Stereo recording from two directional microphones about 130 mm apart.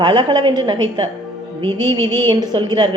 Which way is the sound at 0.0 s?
35° right (ahead or behind).